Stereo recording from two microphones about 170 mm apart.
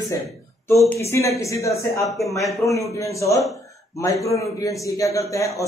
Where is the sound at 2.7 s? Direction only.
20° left (ahead or behind).